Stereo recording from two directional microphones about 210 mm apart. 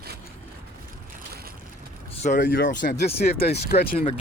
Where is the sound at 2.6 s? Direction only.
35° left (ahead or behind).